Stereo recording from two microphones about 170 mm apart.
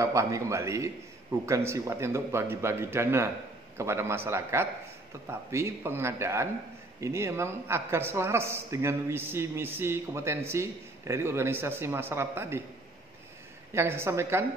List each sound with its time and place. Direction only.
0.0 s a man's voice: 20° right (ahead or behind)
13.7 s a man's voice: 15° right (ahead or behind)